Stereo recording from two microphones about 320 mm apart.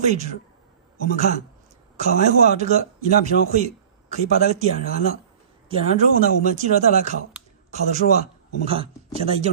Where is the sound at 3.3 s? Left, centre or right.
Left.